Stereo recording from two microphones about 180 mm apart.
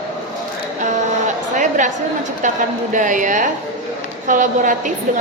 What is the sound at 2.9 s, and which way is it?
A woman's voice, 45° right (ahead or behind).